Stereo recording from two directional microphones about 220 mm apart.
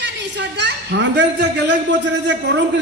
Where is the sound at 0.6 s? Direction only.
55° right (ahead or behind).